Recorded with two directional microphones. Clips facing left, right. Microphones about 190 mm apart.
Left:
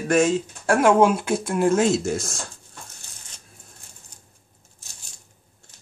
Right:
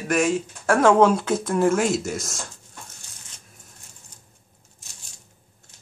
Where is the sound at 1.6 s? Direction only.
25° left (ahead or behind).